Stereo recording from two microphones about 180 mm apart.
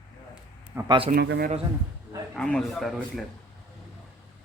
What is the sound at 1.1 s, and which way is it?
Speech, 60° right (ahead or behind).